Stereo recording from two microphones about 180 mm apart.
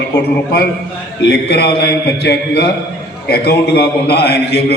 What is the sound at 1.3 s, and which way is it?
Speech, 70° left (ahead or behind).